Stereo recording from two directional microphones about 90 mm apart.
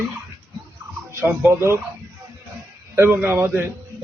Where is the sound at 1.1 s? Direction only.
30° right (ahead or behind).